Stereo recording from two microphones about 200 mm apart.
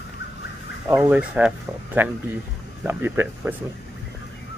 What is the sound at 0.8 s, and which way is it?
Speech, 10° right (ahead or behind).